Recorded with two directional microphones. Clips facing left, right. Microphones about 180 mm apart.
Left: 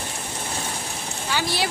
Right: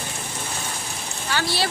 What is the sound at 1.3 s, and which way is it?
Speech, 15° left (ahead or behind).